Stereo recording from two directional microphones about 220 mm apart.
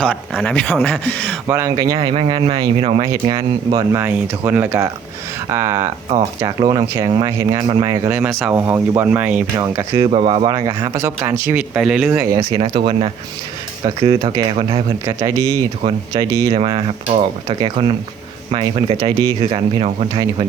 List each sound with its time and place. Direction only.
0.0 s speech: 5° left (ahead or behind)
1.5 s speech: 15° right (ahead or behind)
10.1 s speech: 25° right (ahead or behind)
12.6 s speech: 25° right (ahead or behind)
15.0 s speech: 15° right (ahead or behind)
16.6 s speech: 25° right (ahead or behind)